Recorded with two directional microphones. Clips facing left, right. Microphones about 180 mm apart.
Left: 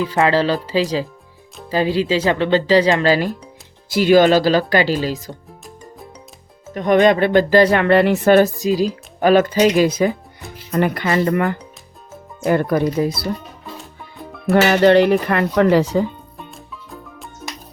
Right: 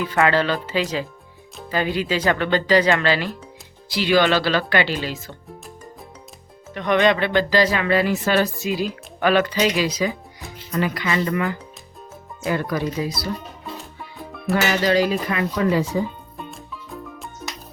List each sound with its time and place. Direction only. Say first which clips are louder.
0.0 s speech: left 3 dB; 30° left (ahead or behind)
6.7 s speech: left 5 dB; 45° left (ahead or behind)
8.6 s speech: left 6 dB; 35° left (ahead or behind)
14.2 s music: left 4 dB; centre (ahead or behind)
14.5 s speech: left 7 dB; 60° left (ahead or behind); by 16.0 s 75° left (ahead or behind)
16.4 s music: right 3 dB; centre (ahead or behind)